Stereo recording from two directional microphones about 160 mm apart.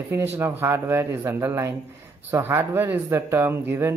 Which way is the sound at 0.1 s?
15° right (ahead or behind).